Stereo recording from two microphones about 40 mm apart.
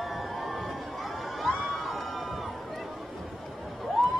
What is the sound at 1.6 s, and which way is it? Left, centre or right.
Crowd, centre.